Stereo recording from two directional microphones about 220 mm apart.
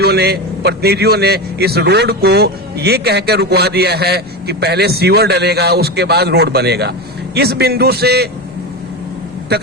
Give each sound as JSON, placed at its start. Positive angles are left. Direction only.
{"t": 0.0, "sound": "a man's voice", "side_deg": -45}
{"t": 9.5, "sound": "a man's voice", "side_deg": -45}